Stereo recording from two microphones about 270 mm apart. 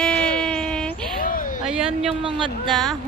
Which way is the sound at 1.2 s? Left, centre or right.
Left.